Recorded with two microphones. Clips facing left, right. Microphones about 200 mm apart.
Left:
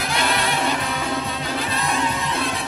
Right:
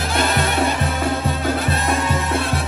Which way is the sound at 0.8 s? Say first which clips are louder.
Right 4 dB; 50° right (ahead or behind).